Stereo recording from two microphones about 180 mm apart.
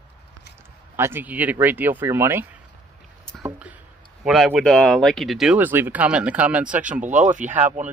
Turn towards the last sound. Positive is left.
turn(degrees=-10)  # may be behind; listen again after turning